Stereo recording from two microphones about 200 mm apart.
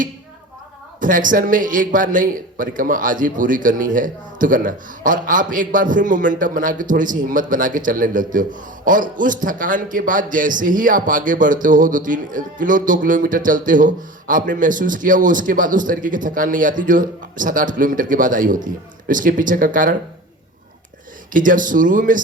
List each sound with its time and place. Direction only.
1.0 s a man's voice: 40° right (ahead or behind)
21.3 s a man's voice: 40° right (ahead or behind)